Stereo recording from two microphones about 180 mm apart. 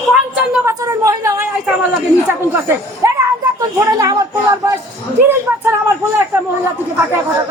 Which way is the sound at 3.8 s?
20° right (ahead or behind).